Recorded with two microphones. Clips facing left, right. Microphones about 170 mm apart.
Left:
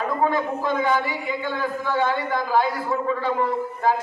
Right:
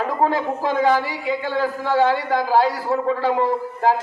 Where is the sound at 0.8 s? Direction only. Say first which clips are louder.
Right 4 dB; 35° right (ahead or behind).